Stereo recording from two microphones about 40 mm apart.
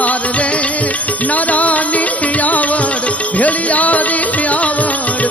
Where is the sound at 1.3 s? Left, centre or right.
Left.